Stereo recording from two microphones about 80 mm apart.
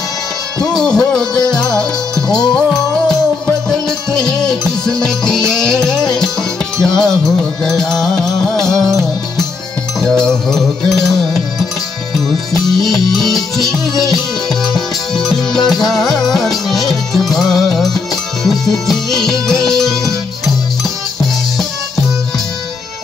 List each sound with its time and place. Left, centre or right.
0.6 s music: centre
2.2 s music: left
4.5 s music: centre
12.3 s music: centre